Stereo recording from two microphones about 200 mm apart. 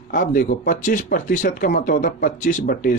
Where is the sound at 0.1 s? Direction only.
40° left (ahead or behind).